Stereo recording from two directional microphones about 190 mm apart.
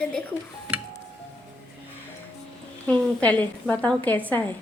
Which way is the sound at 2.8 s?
5° left (ahead or behind).